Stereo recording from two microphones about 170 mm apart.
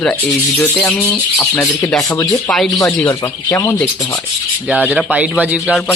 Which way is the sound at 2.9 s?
5° left (ahead or behind).